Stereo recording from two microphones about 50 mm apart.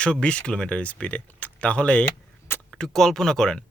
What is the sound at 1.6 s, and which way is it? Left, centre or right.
Speech, left.